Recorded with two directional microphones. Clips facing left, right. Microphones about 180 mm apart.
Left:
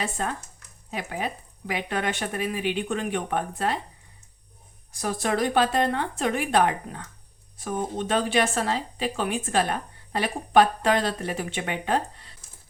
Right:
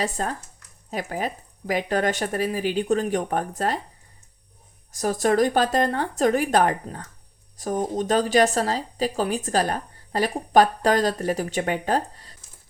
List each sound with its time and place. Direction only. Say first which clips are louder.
0.0 s speech: right 3 dB; 40° right (ahead or behind)
4.9 s speech: right 5 dB; 45° right (ahead or behind)